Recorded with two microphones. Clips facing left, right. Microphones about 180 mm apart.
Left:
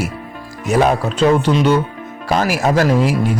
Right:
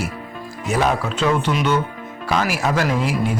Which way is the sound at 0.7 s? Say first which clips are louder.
Left 6 dB; 45° left (ahead or behind).